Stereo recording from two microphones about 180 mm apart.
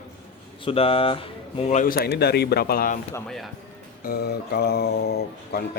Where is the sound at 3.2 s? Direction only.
Centre (ahead or behind).